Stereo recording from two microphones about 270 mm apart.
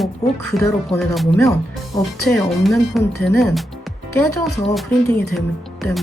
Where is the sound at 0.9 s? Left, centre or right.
Centre.